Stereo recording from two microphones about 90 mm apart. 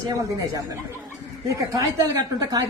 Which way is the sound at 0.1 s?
45° right (ahead or behind).